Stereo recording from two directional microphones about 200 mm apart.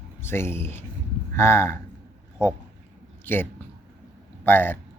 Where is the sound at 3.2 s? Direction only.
10° left (ahead or behind).